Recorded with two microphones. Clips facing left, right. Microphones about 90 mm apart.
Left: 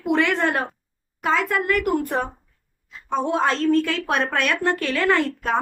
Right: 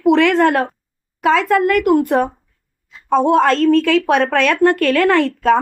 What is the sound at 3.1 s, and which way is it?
A woman's voice, 90° right.